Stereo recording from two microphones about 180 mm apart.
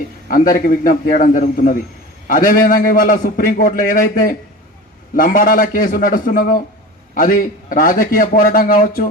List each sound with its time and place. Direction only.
0.3 s a man's voice: 50° left (ahead or behind)